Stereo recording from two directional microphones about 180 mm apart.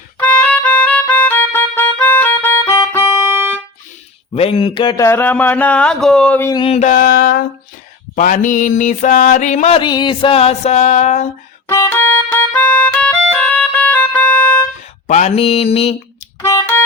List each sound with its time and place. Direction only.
0.2 s music: 5° left (ahead or behind)
3.2 s music: 15° right (ahead or behind)
4.4 s speech: 30° left (ahead or behind); by 6.5 s 5° left (ahead or behind)
6.5 s mantra: 30° left (ahead or behind); by 7.4 s 60° left (ahead or behind)
8.1 s mantra: 45° left (ahead or behind)
9.8 s a sound: 25° left (ahead or behind); by 11.3 s 40° left (ahead or behind)
11.7 s music: 15° left (ahead or behind)
15.0 s a sound: 40° left (ahead or behind)
16.4 s music: 15° left (ahead or behind)